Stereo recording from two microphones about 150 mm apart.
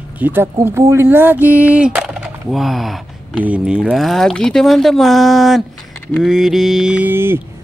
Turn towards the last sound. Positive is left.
turn(degrees=-15)  # may be behind; listen again after turning